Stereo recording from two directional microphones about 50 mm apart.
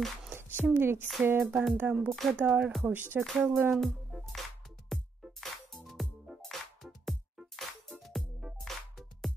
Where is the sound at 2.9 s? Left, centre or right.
Right.